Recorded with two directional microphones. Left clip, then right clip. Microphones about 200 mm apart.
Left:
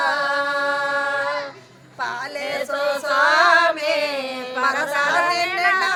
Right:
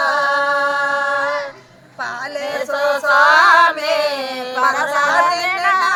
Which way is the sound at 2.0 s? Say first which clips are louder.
Right 2 dB; 20° left (ahead or behind).